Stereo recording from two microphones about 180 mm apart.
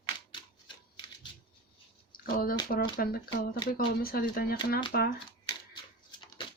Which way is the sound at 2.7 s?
55° left (ahead or behind).